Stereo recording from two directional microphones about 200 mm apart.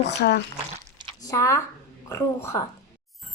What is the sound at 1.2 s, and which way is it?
A woman's voice, 15° left (ahead or behind).